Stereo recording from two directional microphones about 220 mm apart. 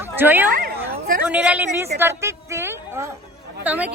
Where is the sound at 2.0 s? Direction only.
10° right (ahead or behind).